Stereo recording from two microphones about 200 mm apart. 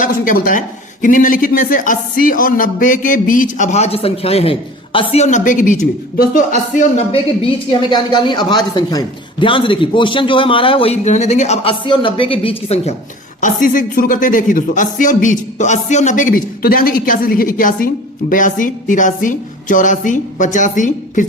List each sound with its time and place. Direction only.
0.0 s speech: 45° left (ahead or behind)
7.7 s speech: 25° left (ahead or behind)
13.4 s speech: 40° left (ahead or behind)